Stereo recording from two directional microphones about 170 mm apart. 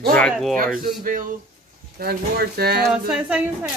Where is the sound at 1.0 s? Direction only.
55° right (ahead or behind).